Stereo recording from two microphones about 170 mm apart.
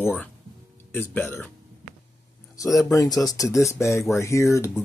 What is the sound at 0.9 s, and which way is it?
Speech, 10° left (ahead or behind).